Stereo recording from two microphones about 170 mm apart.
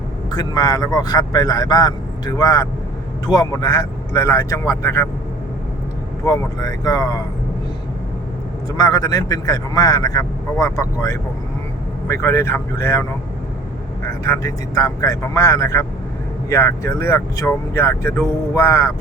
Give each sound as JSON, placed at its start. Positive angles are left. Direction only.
{"t": 0.3, "sound": "speech", "side_deg": 25}
{"t": 6.2, "sound": "speech", "side_deg": 20}
{"t": 8.8, "sound": "speech", "side_deg": 20}
{"t": 14.1, "sound": "speech", "side_deg": 20}